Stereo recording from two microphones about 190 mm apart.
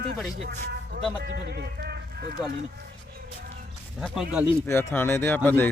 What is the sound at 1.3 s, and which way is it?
Speech, 60° right (ahead or behind).